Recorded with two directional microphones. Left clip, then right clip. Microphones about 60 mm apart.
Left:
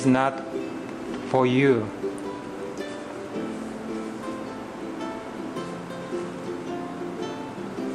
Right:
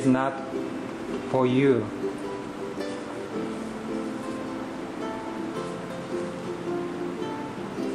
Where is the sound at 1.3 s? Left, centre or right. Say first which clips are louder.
Left 2 dB; left.